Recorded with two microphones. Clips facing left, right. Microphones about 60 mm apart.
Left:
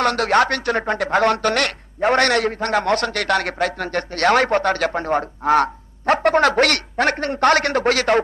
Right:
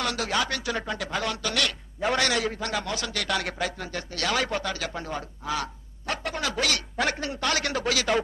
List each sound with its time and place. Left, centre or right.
0.0 s speech: left